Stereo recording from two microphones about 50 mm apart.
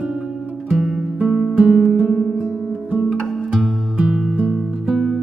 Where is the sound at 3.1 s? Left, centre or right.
Centre.